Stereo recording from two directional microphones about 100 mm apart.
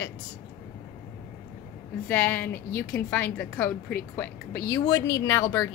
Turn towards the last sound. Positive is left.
turn(degrees=30)  # may be behind; listen again after turning